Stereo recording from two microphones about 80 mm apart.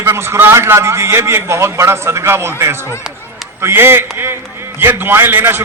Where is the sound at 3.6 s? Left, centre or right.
Right.